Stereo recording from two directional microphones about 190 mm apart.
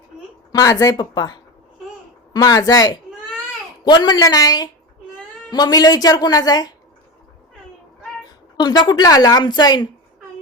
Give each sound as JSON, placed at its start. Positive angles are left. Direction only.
{"t": 0.5, "sound": "a woman's voice", "side_deg": 20}
{"t": 8.5, "sound": "a woman's voice", "side_deg": 20}